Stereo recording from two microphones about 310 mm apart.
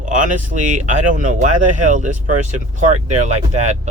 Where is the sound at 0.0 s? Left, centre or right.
Right.